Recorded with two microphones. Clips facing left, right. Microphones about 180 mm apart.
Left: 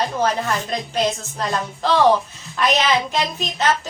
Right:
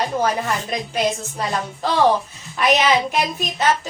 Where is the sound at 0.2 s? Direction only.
10° right (ahead or behind).